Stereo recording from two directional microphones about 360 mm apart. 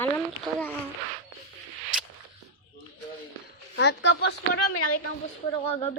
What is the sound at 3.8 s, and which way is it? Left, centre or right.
Speech, left.